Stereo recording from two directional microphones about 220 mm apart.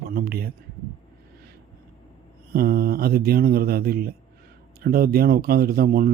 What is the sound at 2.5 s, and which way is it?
Speech, 40° right (ahead or behind).